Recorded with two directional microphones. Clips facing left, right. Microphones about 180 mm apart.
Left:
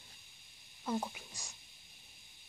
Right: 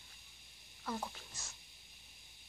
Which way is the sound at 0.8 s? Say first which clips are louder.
Left 5 dB; 20° left (ahead or behind).